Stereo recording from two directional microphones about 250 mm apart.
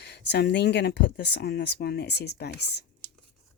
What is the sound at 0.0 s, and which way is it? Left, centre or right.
Speech, left.